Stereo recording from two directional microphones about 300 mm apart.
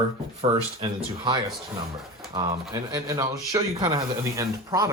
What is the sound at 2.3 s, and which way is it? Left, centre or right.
A man's voice, centre.